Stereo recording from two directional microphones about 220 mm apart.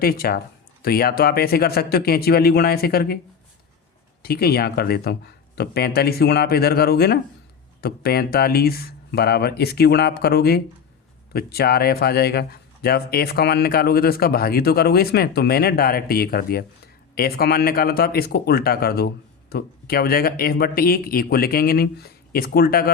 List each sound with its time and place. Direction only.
0.0 s speech: 45° left (ahead or behind)
4.2 s speech: 45° left (ahead or behind)